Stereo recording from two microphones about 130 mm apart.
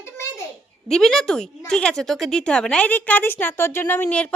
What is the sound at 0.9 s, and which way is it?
Speech, 5° left (ahead or behind).